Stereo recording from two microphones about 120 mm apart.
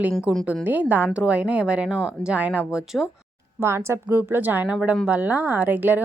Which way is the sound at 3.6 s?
20° right (ahead or behind).